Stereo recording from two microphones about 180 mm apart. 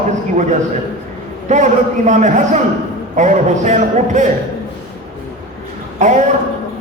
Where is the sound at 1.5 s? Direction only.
40° right (ahead or behind).